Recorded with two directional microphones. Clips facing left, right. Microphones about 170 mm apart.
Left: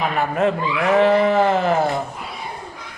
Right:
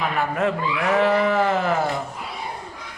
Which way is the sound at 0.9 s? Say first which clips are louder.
Left 4 dB; 25° left (ahead or behind).